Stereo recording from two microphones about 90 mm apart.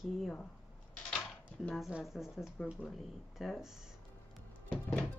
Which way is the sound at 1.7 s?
5° right (ahead or behind).